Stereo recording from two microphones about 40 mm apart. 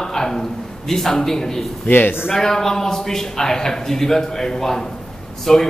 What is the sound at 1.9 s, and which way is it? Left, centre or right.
Speech, left.